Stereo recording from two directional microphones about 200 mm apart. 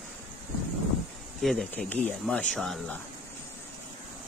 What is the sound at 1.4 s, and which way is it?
Speech, centre (ahead or behind).